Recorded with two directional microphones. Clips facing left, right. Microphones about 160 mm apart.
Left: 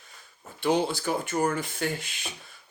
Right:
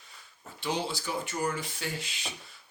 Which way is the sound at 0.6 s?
50° left (ahead or behind).